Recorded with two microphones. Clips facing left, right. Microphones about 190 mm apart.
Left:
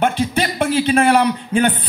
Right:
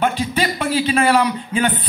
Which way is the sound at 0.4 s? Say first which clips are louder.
Left 1 dB; 60° left (ahead or behind).